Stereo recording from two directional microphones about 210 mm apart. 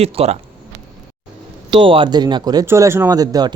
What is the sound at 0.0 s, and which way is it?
Speech, 30° right (ahead or behind).